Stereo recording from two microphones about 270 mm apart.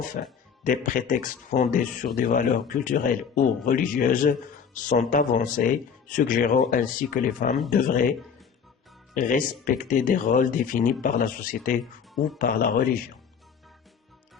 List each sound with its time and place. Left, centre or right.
0.1 s speech: left
9.1 s speech: left